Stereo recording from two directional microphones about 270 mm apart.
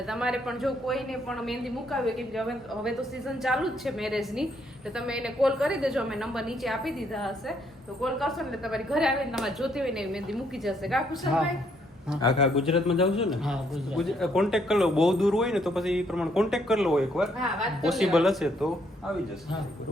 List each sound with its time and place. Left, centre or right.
0.1 s speech: centre
12.2 s speech: left
13.2 s speech: centre